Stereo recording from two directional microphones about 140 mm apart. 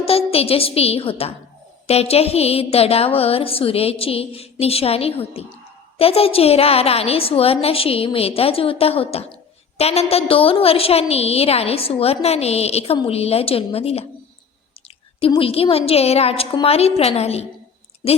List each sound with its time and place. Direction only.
0.0 s a woman's voice: 45° left (ahead or behind)
15.4 s a woman's voice: 40° left (ahead or behind)